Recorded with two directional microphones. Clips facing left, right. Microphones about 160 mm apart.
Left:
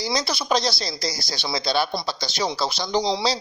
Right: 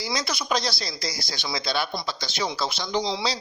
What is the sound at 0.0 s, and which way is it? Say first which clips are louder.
Speech: left 3 dB; 35° left (ahead or behind).